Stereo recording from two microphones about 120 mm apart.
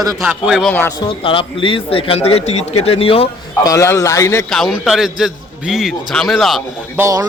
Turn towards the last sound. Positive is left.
turn(degrees=-25)  # may be behind; listen again after turning